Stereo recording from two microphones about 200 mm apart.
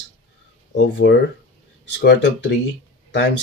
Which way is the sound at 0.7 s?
60° left (ahead or behind).